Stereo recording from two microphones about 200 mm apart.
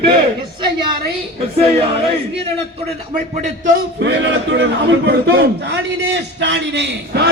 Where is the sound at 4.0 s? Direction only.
60° right (ahead or behind).